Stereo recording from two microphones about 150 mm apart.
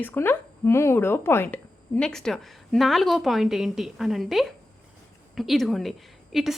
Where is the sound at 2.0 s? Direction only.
5° left (ahead or behind).